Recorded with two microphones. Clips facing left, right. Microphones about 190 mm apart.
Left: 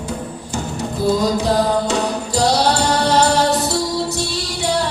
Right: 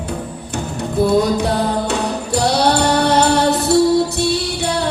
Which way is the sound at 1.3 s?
60° right (ahead or behind).